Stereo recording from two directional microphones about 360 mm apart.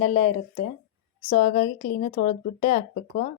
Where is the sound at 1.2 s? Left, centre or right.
Centre.